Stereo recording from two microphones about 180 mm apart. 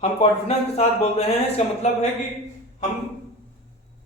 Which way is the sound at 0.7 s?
35° left (ahead or behind).